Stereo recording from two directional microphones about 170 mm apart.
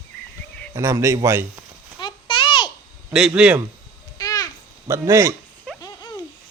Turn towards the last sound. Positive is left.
turn(degrees=20)  # may be behind; listen again after turning